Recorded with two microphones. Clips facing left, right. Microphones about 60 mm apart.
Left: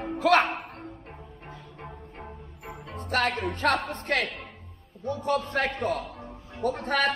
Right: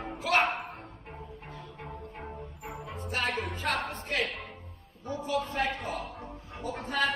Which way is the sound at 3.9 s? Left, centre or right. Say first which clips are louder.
Left 4 dB; left.